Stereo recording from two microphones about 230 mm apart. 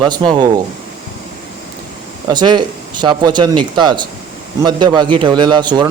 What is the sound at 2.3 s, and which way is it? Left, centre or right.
A man's voice, centre.